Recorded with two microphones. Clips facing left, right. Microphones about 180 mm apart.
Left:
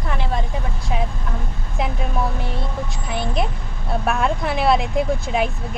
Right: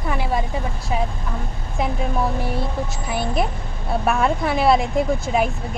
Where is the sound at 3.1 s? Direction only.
Centre (ahead or behind).